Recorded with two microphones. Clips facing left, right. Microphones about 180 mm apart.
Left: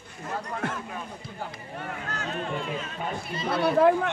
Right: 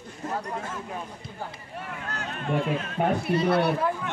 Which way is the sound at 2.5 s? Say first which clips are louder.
Right 6 dB; 60° right (ahead or behind).